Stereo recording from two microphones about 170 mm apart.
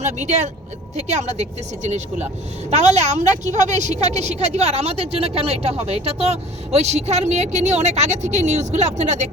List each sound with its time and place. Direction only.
0.0 s a woman's voice: 45° right (ahead or behind)